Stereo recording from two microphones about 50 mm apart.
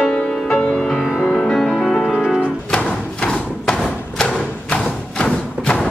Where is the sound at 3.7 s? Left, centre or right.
Centre.